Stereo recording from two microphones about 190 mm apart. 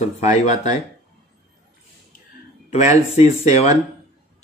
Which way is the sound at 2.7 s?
35° left (ahead or behind).